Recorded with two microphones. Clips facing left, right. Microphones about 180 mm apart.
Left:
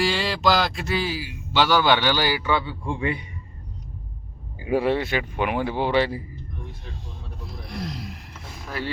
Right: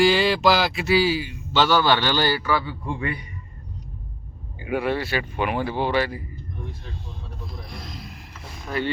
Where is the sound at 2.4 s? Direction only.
20° left (ahead or behind).